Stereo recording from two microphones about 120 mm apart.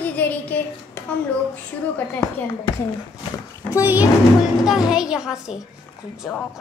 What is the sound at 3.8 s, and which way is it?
Speech, 15° right (ahead or behind).